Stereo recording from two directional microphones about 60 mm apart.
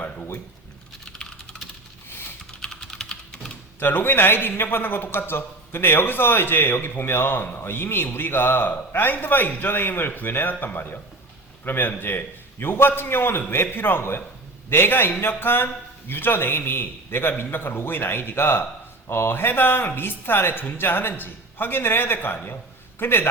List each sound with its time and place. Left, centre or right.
0.0 s a sound: left
1.0 s typing: centre
3.8 s a man's voice: left